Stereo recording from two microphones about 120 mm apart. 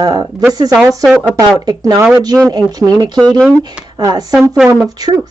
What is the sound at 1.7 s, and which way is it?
Speech, 30° right (ahead or behind).